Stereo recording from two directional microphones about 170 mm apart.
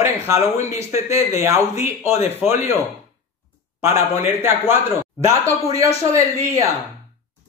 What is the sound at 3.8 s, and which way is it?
Speech, 15° right (ahead or behind).